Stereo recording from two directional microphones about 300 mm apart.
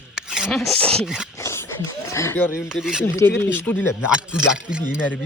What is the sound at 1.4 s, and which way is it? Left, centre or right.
Dog, centre.